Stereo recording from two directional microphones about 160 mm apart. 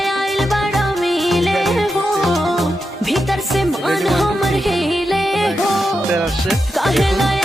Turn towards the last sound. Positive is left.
turn(degrees=0)  # may be behind; listen again after turning